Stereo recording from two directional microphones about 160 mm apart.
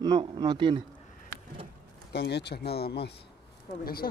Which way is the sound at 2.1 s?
90° left.